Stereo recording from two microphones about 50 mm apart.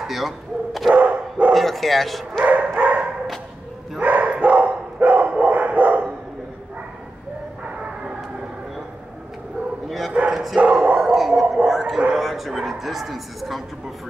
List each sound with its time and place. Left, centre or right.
0.0 s bow-wow: centre
0.9 s dog: right
1.5 s bow-wow: centre
2.4 s dog: right
4.0 s bow-wow: right
9.8 s bow-wow: centre
10.6 s a sound: right
11.0 s a sound: centre
12.2 s speech: centre